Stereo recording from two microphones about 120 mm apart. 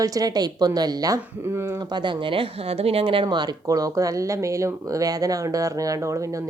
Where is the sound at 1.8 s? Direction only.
40° right (ahead or behind).